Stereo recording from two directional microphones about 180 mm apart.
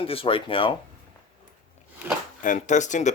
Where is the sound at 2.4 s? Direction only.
45° left (ahead or behind).